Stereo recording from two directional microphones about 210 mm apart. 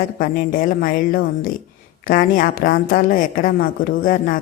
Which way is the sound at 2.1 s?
40° left (ahead or behind).